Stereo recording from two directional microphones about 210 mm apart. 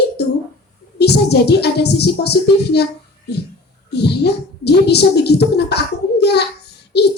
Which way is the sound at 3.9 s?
50° left (ahead or behind).